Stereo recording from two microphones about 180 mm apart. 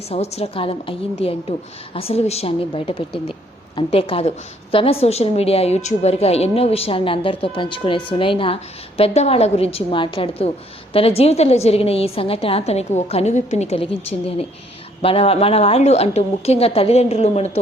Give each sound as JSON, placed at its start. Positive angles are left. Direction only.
{"t": 0.1, "sound": "a woman's voice", "side_deg": 35}